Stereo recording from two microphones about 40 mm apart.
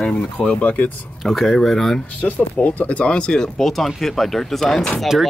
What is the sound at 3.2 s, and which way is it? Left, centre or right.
Speech, left.